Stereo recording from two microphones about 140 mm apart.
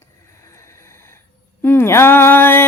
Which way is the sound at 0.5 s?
20° left (ahead or behind).